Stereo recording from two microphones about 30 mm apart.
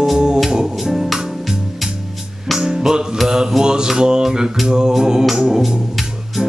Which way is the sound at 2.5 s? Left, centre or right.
Centre.